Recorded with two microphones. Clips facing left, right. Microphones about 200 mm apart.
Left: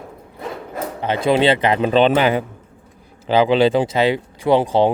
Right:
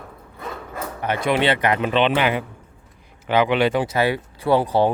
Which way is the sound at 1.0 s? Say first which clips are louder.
Left 4 dB; 30° left (ahead or behind).